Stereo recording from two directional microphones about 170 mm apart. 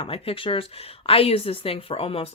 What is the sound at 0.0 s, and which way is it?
Speech, 35° left (ahead or behind).